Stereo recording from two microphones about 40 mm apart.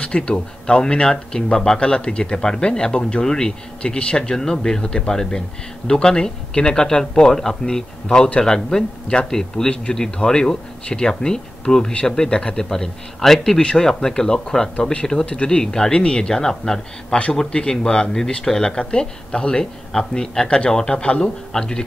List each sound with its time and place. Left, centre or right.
0.0 s speech: left; by 13.6 s centre
13.6 s speech: left
15.3 s speech: left
15.6 s speech: centre
20.4 s speech: left